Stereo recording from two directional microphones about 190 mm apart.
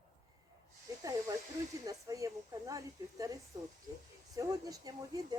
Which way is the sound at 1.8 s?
20° right (ahead or behind).